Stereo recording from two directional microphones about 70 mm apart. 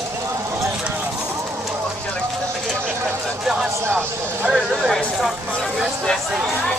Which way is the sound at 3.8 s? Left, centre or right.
Right.